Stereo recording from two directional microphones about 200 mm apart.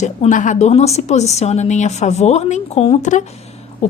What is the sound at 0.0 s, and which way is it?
Speech, 35° left (ahead or behind).